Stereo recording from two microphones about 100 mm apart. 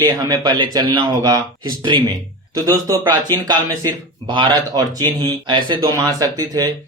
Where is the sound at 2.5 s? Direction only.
35° right (ahead or behind); by 5.8 s 50° right (ahead or behind).